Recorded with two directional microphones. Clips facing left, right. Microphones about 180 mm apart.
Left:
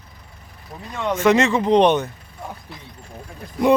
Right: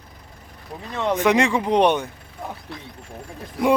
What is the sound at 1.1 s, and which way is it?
Speech, 15° right (ahead or behind).